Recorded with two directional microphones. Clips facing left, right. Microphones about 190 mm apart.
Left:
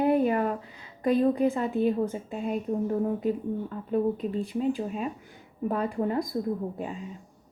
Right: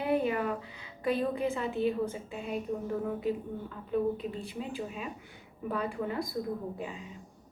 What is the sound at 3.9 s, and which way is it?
A woman's voice, 45° left (ahead or behind).